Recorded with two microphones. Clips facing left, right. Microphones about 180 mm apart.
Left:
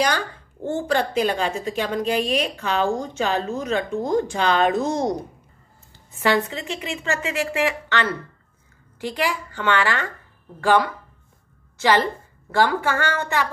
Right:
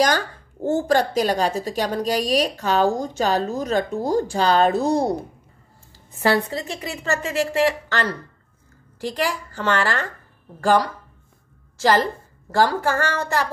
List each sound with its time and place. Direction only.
0.7 s a woman's voice: 40° right (ahead or behind)
6.2 s a woman's voice: 35° right (ahead or behind)